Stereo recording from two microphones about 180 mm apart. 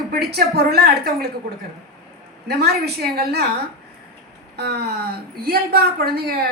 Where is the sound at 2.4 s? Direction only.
65° right (ahead or behind).